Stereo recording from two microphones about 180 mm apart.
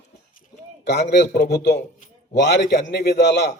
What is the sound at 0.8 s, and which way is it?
A man's voice, 70° left (ahead or behind).